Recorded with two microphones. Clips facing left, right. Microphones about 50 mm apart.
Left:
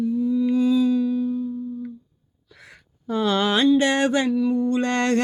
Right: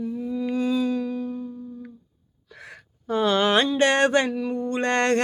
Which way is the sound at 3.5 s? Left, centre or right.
Right.